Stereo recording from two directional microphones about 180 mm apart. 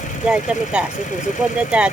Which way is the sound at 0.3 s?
5° right (ahead or behind).